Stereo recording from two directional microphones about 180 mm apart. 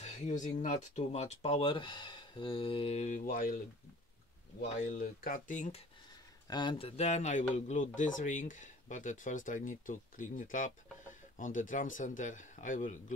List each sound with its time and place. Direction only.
0.0 s speech: 40° left (ahead or behind)
4.6 s speech: 40° left (ahead or behind)
4.9 s speech: 55° left (ahead or behind)
6.4 s speech: 25° left (ahead or behind); by 13.0 s 45° left (ahead or behind)